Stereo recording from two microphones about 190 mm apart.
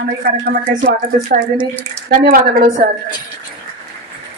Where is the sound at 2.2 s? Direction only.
50° right (ahead or behind).